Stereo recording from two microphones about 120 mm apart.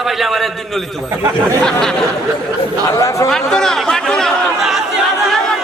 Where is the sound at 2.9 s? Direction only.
25° left (ahead or behind).